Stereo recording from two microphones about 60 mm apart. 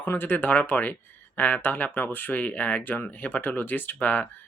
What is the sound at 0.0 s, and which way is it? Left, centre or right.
Speech, left.